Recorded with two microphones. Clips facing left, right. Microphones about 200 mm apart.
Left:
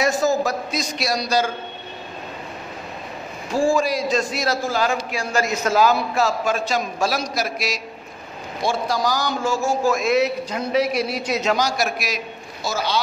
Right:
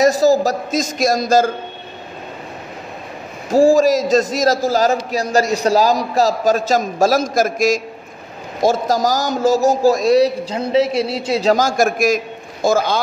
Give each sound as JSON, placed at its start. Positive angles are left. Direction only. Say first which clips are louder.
{"t": 0.0, "sound": "a man's voice", "louder": "right 7 dB", "side_deg": -35}
{"t": 3.4, "sound": "a man's voice", "louder": "right 8 dB", "side_deg": -40}
{"t": 11.5, "sound": "a man's voice", "louder": "right 6 dB", "side_deg": -45}